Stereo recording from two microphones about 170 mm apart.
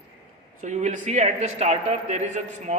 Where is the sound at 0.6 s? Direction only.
45° right (ahead or behind).